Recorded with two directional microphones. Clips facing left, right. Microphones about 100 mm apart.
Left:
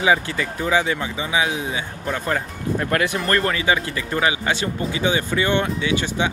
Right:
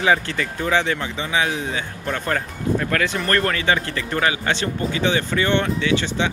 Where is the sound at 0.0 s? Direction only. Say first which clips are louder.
Even; 15° left (ahead or behind).